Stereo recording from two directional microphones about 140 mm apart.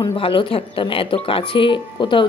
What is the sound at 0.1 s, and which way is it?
Speech, 40° left (ahead or behind).